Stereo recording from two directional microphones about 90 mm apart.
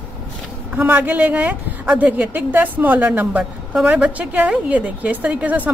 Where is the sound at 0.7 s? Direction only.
20° right (ahead or behind).